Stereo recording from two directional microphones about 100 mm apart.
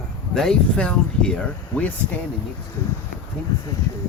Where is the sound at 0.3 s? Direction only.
5° left (ahead or behind).